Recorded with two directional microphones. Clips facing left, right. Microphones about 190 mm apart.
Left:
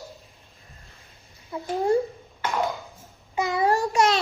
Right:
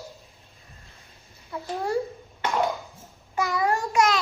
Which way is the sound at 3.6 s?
30° left (ahead or behind).